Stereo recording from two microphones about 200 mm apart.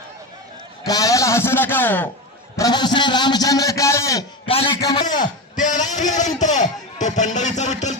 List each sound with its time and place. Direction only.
0.9 s a man's voice: 20° left (ahead or behind)
2.6 s a man's voice: 20° left (ahead or behind)
4.4 s a man's voice: 25° left (ahead or behind)
5.0 s a man's voice: 40° left (ahead or behind)